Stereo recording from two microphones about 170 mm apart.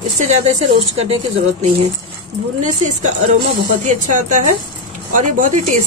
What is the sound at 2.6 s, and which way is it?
Speech, 45° right (ahead or behind).